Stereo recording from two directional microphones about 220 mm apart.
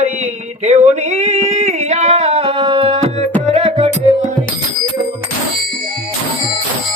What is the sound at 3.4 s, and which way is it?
Music, 30° right (ahead or behind).